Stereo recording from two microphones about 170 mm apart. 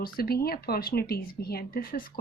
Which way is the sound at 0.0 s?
65° left (ahead or behind).